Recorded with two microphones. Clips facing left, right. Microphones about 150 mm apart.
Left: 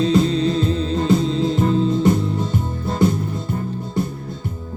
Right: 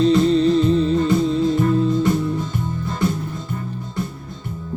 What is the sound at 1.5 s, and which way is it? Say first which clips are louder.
Music: even; 20° left (ahead or behind).